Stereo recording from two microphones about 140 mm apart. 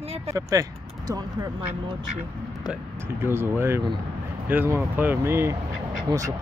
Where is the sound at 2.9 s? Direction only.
15° right (ahead or behind).